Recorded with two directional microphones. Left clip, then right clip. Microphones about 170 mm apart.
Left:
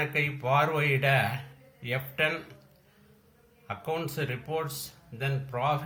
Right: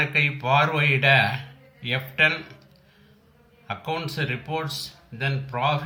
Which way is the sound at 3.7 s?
10° left (ahead or behind).